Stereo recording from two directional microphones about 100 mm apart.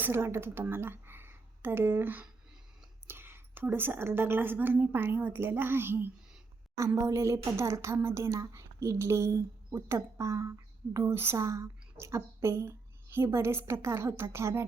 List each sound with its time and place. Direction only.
0.0 s speech: 25° right (ahead or behind)